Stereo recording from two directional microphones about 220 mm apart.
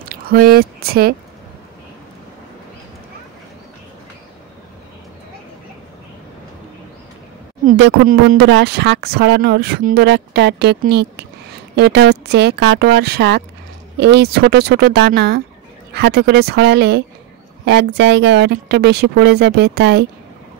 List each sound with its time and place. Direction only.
0.0 s speech: 45° right (ahead or behind)
7.6 s speech: 45° right (ahead or behind)